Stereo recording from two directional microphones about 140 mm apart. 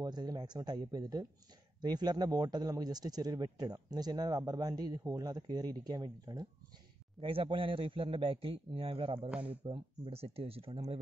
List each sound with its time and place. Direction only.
0.0 s a man's voice: 30° right (ahead or behind)
7.2 s a man's voice: 40° right (ahead or behind)